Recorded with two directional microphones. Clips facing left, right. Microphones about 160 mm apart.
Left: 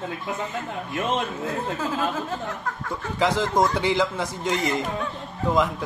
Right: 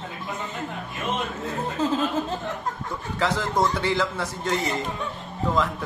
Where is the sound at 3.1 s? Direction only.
15° left (ahead or behind).